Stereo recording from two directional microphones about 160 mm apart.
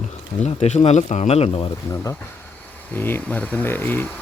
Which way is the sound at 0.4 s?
45° left (ahead or behind).